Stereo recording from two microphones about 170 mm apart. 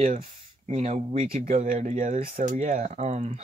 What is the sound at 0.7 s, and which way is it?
Speech, 40° right (ahead or behind).